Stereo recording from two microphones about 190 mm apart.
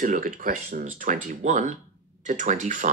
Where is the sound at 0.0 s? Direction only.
45° right (ahead or behind).